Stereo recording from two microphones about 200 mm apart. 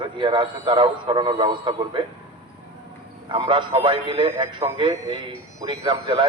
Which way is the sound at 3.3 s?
25° right (ahead or behind).